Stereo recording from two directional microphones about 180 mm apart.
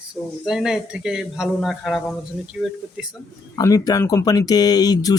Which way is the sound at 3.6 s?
20° left (ahead or behind).